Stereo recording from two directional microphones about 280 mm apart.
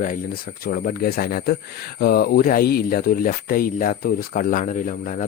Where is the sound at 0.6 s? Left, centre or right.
Left.